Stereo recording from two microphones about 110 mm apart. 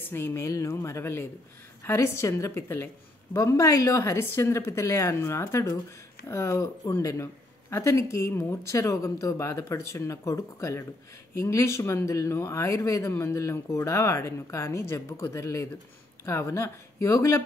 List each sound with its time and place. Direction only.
0.1 s speech: 20° left (ahead or behind)